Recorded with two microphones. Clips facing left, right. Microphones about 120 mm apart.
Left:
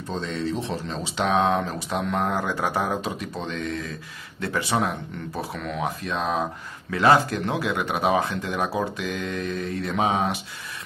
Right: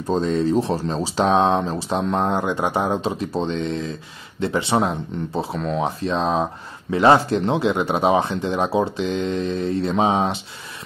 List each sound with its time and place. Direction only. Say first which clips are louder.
0.1 s speech: right 9 dB; 40° right (ahead or behind)